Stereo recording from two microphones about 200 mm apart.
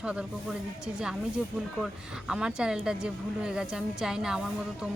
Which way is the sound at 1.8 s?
5° right (ahead or behind).